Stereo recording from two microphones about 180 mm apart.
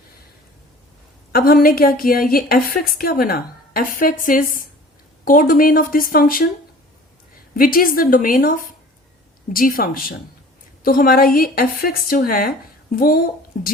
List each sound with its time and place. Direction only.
1.3 s a woman's voice: 55° left (ahead or behind)
7.5 s speech: 55° left (ahead or behind)